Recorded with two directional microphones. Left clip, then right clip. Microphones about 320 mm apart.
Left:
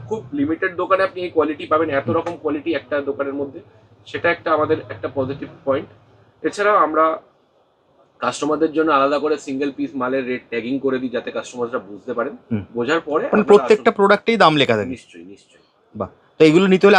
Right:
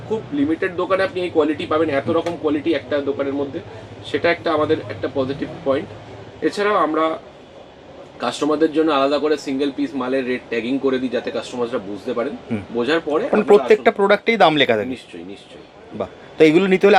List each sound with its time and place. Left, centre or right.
0.6 s speech: centre
6.4 s speech: centre
8.2 s speech: centre
13.3 s speech: left
16.0 s speech: left